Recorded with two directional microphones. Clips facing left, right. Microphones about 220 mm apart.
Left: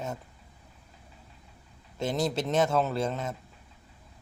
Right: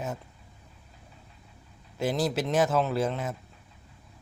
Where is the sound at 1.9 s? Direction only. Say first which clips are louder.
Right 1 dB; 5° right (ahead or behind).